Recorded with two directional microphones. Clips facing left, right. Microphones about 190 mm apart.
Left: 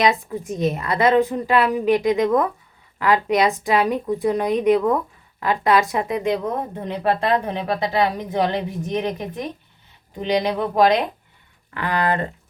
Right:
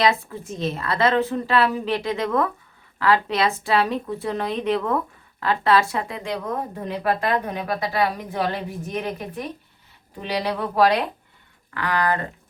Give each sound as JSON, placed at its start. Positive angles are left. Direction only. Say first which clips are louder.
{"t": 0.0, "sound": "a woman's voice", "louder": "left 2 dB", "side_deg": 15}